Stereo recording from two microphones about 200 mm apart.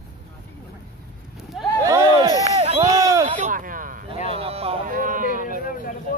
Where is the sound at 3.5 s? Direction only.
45° right (ahead or behind).